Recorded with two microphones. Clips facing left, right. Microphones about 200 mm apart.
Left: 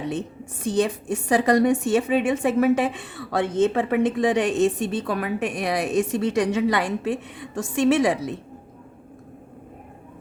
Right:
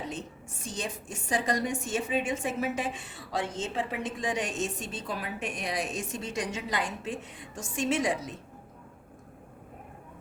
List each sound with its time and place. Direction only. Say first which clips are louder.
0.1 s a woman's voice: left 10 dB; 60° left (ahead or behind)